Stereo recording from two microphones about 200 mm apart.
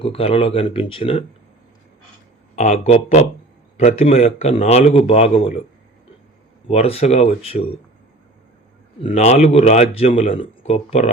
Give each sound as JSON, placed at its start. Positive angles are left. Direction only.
{"t": 0.0, "sound": "speech", "side_deg": 30}
{"t": 2.6, "sound": "speech", "side_deg": 35}
{"t": 6.7, "sound": "speech", "side_deg": 30}
{"t": 9.0, "sound": "speech", "side_deg": 30}